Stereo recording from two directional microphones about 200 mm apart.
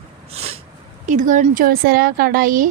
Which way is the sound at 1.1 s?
40° right (ahead or behind).